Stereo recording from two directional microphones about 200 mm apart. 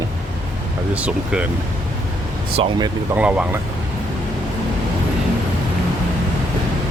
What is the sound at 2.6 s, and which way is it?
Speech, 20° right (ahead or behind).